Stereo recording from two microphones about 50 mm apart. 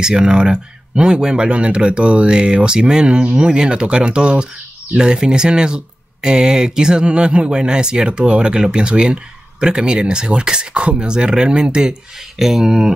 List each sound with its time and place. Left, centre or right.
0.0 s speech: centre